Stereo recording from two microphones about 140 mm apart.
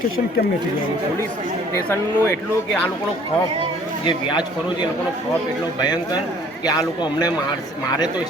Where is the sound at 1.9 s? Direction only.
20° left (ahead or behind).